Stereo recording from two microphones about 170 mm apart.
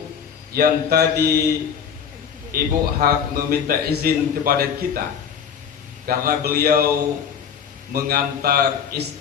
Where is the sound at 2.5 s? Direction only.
60° right (ahead or behind).